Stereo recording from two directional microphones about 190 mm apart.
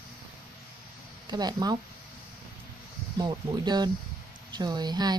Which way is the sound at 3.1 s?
20° right (ahead or behind).